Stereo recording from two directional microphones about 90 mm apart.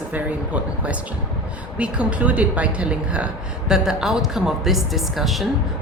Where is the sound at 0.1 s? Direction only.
15° right (ahead or behind).